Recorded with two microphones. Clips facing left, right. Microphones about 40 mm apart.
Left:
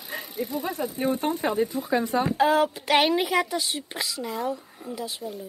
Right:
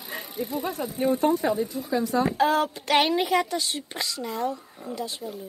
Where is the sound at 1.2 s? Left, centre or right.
Left.